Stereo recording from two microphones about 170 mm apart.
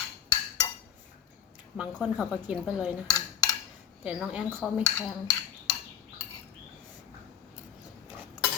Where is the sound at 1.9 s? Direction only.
Centre (ahead or behind).